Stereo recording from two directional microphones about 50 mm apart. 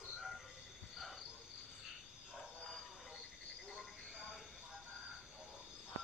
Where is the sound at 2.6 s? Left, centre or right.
Centre.